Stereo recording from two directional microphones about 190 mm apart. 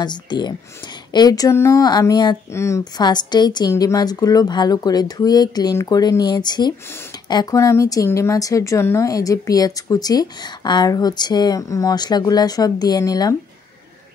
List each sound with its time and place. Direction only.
0.0 s a woman's voice: 25° left (ahead or behind)